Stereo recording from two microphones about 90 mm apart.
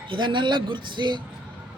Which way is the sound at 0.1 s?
65° right (ahead or behind).